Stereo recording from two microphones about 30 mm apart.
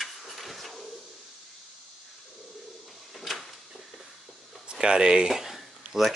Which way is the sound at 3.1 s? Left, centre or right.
Centre.